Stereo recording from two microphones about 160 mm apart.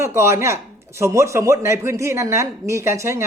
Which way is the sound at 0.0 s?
15° right (ahead or behind).